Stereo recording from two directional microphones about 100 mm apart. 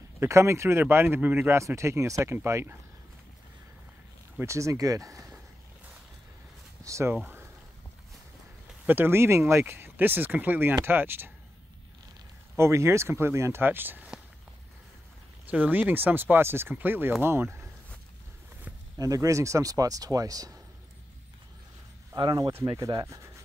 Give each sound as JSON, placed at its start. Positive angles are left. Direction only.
{"t": 0.2, "sound": "speech", "side_deg": -30}
{"t": 4.4, "sound": "speech", "side_deg": -30}
{"t": 6.8, "sound": "speech", "side_deg": -30}
{"t": 8.8, "sound": "speech", "side_deg": -20}
{"t": 12.5, "sound": "speech", "side_deg": -30}
{"t": 15.4, "sound": "speech", "side_deg": -15}
{"t": 18.9, "sound": "speech", "side_deg": -35}
{"t": 22.1, "sound": "speech", "side_deg": -40}
{"t": 23.0, "sound": "speech", "side_deg": -30}